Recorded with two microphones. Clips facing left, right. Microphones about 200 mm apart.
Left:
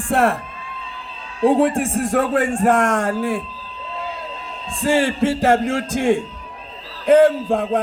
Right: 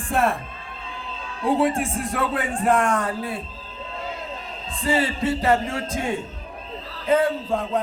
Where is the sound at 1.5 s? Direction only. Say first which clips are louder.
Left 1 dB; 50° left (ahead or behind).